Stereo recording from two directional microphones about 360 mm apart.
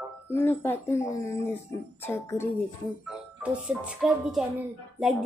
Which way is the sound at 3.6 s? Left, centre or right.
Centre.